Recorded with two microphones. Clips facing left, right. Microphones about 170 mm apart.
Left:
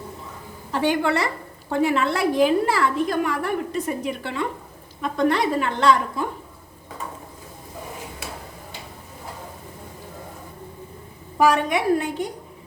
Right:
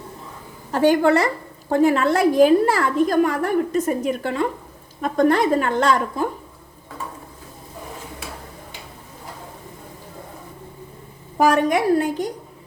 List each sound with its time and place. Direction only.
0.7 s a woman's voice: 45° right (ahead or behind)
11.3 s a woman's voice: 45° right (ahead or behind)